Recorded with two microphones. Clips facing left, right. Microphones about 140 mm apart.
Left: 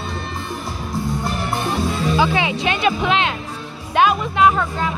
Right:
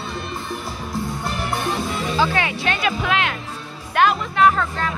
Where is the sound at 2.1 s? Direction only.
15° left (ahead or behind).